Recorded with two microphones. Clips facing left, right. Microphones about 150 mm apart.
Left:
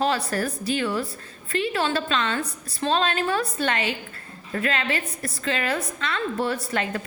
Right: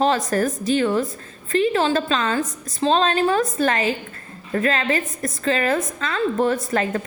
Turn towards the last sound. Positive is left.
turn(degrees=-45)  # may be behind; listen again after turning